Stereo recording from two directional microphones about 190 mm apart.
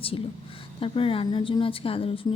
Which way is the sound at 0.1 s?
30° left (ahead or behind).